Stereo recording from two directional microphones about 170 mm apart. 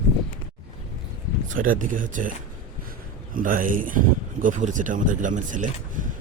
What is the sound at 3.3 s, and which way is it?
Speech, 55° right (ahead or behind).